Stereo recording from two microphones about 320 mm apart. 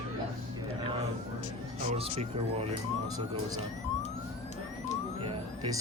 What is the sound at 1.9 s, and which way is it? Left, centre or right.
Speech, centre.